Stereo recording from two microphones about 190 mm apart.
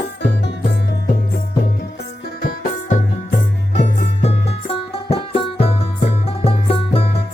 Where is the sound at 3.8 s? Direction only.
35° left (ahead or behind).